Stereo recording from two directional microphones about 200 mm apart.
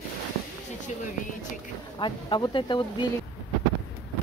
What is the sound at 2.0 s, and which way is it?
Speech, 25° left (ahead or behind).